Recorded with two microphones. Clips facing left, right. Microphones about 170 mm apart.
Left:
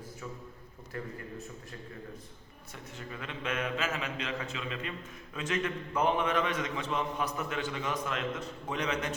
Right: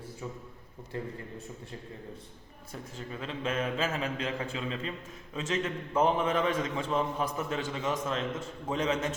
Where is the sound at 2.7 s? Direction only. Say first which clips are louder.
Right 3 dB; 30° right (ahead or behind).